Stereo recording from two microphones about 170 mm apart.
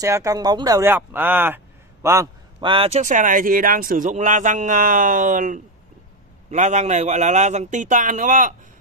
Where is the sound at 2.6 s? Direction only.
30° right (ahead or behind).